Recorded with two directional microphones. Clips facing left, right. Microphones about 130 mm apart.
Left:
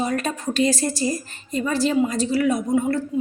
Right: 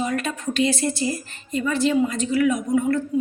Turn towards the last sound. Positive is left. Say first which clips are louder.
# even
turn(degrees=35)  # may be behind; listen again after turning